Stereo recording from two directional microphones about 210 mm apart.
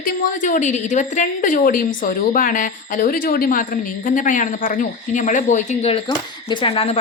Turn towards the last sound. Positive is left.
turn(degrees=25)  # may be behind; listen again after turning